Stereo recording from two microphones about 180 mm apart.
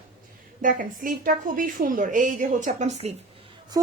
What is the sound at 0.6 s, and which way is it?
A woman's voice, 50° right (ahead or behind).